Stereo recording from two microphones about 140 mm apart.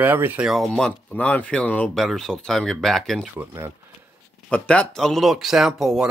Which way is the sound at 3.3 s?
15° right (ahead or behind).